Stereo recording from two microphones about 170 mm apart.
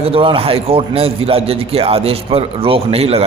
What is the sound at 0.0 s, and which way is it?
Speech, 35° right (ahead or behind).